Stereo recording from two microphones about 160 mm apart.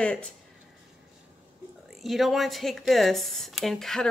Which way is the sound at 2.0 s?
Centre (ahead or behind).